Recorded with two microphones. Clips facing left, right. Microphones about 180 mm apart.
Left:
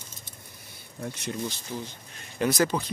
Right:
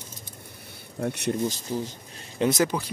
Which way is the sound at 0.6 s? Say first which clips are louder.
Right 7 dB; 65° right (ahead or behind).